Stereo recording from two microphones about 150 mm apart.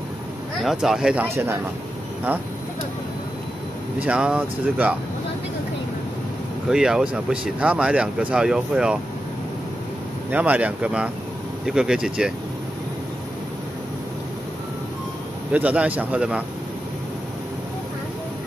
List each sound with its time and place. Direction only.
0.7 s speech: 5° right (ahead or behind)
1.2 s speech: 15° right (ahead or behind)
4.0 s speech: 5° right (ahead or behind)
6.7 s speech: 5° right (ahead or behind)
10.3 s speech: 10° right (ahead or behind)
15.5 s speech: 10° right (ahead or behind)